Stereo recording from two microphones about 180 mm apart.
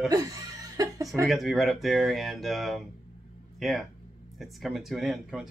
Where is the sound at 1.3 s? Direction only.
Centre (ahead or behind).